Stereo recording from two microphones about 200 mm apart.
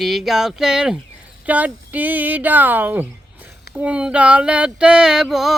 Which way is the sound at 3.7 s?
5° right (ahead or behind).